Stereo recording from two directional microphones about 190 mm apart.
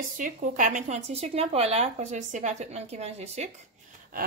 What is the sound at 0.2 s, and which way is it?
A woman's voice, 45° right (ahead or behind).